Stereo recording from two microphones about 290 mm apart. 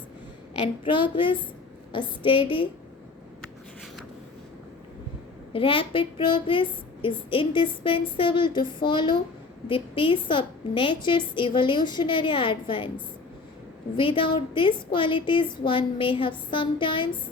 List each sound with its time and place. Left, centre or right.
0.6 s a woman's voice: centre
5.5 s a woman's voice: centre
13.9 s a woman's voice: centre